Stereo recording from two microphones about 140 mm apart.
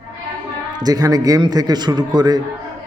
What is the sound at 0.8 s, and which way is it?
A man's voice, 25° right (ahead or behind).